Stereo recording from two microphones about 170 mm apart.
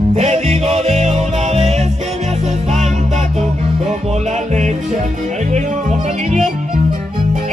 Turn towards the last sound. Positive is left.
turn(degrees=-45)  # may be behind; listen again after turning